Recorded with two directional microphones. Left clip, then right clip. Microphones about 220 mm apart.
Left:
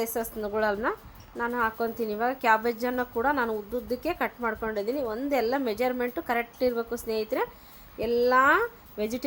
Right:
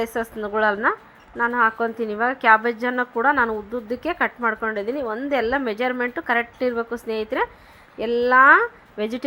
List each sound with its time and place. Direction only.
0.0 s speech: 15° right (ahead or behind)